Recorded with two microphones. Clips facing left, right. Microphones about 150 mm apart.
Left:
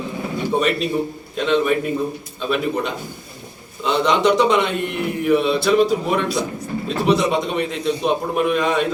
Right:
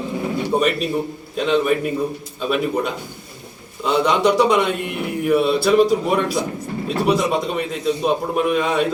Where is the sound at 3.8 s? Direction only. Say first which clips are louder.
Even; 10° right (ahead or behind).